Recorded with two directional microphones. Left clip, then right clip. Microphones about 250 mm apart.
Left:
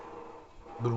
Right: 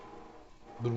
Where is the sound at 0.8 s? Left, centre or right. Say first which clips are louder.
Left 3 dB; centre.